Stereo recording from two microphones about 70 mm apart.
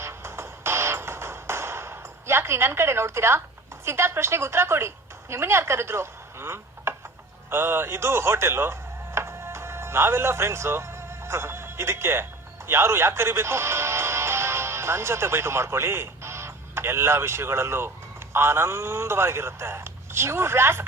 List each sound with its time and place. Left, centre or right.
0.0 s music: right
3.8 s a man's voice: right